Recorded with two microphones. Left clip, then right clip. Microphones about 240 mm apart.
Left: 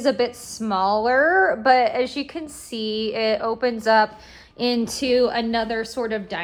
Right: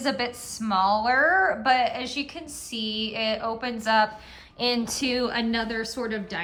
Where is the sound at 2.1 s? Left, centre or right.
Centre.